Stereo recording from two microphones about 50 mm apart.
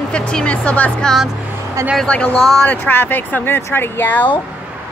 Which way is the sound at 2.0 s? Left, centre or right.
Left.